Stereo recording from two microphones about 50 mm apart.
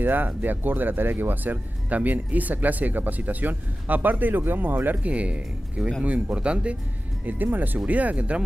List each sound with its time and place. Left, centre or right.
0.0 s speech: right
5.1 s speech: right
7.5 s speech: right